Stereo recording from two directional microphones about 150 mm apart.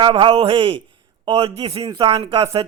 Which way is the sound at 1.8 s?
30° right (ahead or behind).